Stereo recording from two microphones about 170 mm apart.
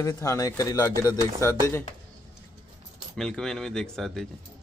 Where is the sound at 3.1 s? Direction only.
5° left (ahead or behind).